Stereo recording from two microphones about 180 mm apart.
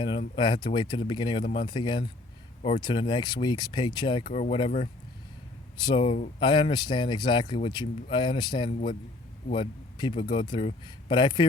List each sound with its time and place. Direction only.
0.0 s speech: 25° left (ahead or behind)
2.6 s speech: 35° left (ahead or behind)
2.8 s speech: 25° left (ahead or behind)
5.8 s speech: 30° left (ahead or behind)
6.4 s a man's voice: 25° left (ahead or behind)